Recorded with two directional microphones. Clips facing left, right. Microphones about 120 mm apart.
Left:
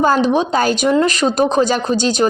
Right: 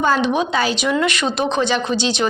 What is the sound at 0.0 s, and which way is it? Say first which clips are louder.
Speech: left 3 dB; 40° left (ahead or behind).